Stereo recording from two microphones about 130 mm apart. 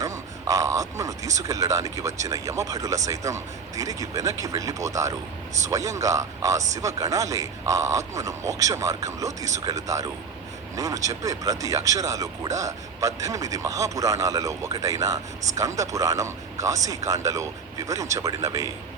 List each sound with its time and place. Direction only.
0.0 s speech: 25° right (ahead or behind)